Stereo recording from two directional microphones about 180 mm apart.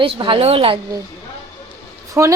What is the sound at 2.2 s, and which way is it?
Speech, 15° right (ahead or behind).